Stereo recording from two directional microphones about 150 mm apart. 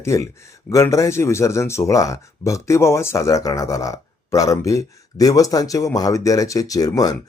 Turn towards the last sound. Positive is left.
turn(degrees=25)  # may be behind; listen again after turning